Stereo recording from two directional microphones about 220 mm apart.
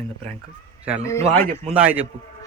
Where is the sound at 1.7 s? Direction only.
5° right (ahead or behind).